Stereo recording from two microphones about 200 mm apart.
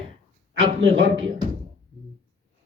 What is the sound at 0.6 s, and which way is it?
Speech, 70° right (ahead or behind).